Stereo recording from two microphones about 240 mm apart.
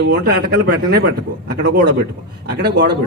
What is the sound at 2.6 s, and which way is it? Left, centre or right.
Speech, right.